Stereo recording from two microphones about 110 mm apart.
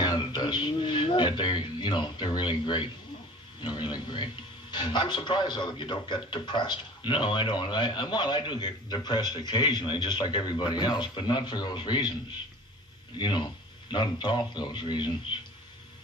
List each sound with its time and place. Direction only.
0.0 s music: 40° left (ahead or behind)
3.6 s a man's voice: 45° left (ahead or behind)
13.1 s a man's voice: 45° left (ahead or behind)